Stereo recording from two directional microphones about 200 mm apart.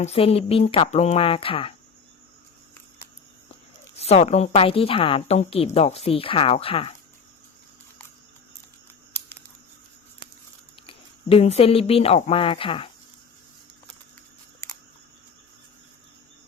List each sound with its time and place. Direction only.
0.0 s a woman's voice: 30° left (ahead or behind)
3.9 s a woman's voice: 30° left (ahead or behind)
10.8 s speech: 30° left (ahead or behind)
14.6 s camera: 15° left (ahead or behind)